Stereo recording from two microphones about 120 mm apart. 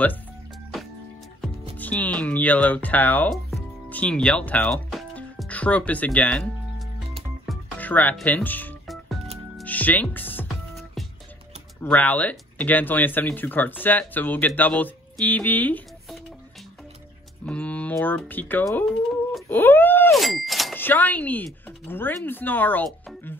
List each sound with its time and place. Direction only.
1.8 s speech: 10° left (ahead or behind)
8.8 s music: centre (ahead or behind)
9.7 s speech: 15° left (ahead or behind)
10.5 s music: centre (ahead or behind)
11.8 s speech: 15° left (ahead or behind)
17.5 s speech: 10° left (ahead or behind)
18.9 s bird: centre (ahead or behind)
19.5 s speech: 15° left (ahead or behind)
20.1 s a sound: centre (ahead or behind)
20.7 s speech: 15° left (ahead or behind)